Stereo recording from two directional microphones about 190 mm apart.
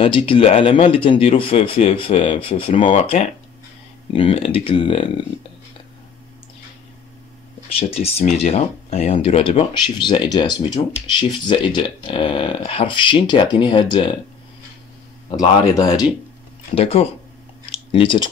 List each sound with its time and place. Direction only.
0.0 s speech: 30° left (ahead or behind)
7.7 s speech: 30° left (ahead or behind)
15.3 s speech: 25° left (ahead or behind)
17.6 s a sound: 25° left (ahead or behind)